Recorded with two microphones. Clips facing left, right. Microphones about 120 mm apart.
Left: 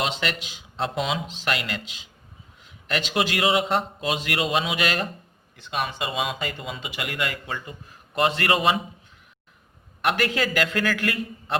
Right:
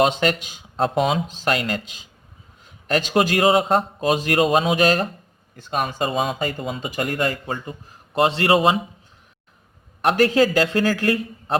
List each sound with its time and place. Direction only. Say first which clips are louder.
0.0 s a man's voice: right 9 dB; 45° right (ahead or behind); by 8.8 s 30° right (ahead or behind)
10.0 s speech: right 7 dB; 35° right (ahead or behind)